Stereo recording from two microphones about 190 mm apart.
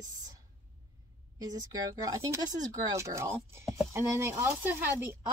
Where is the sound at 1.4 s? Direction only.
20° right (ahead or behind).